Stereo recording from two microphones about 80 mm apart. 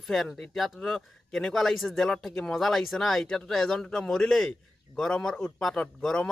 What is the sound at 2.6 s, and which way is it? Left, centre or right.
Speech, centre.